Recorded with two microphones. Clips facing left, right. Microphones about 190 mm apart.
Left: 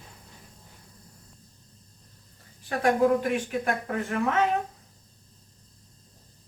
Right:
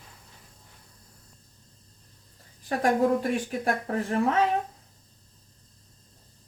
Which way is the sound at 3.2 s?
35° right (ahead or behind).